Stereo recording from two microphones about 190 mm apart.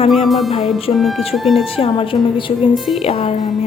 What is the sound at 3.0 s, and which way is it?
Speech, 30° left (ahead or behind).